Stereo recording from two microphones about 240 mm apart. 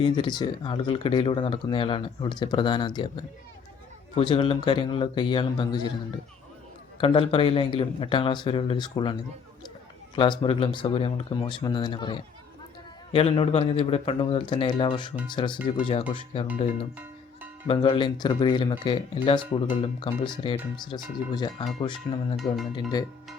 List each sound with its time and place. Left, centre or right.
0.0 s speech: centre
7.0 s speech: left
10.2 s speech: left
17.7 s speech: left
22.4 s speech: centre
22.7 s speech: centre